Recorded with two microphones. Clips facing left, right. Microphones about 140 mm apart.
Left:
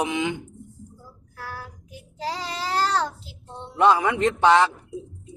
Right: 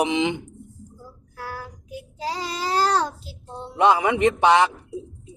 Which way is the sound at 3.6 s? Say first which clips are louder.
Even; 15° right (ahead or behind).